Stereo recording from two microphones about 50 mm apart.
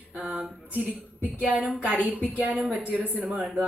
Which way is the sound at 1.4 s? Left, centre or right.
Right.